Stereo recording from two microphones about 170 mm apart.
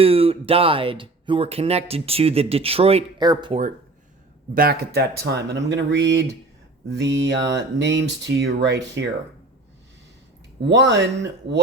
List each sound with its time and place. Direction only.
0.0 s speech: 35° right (ahead or behind)
4.5 s speech: 65° right (ahead or behind); by 9.0 s 90° right
10.7 s speech: 90° right